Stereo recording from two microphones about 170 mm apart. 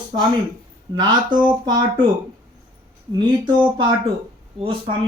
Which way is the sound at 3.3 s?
25° right (ahead or behind).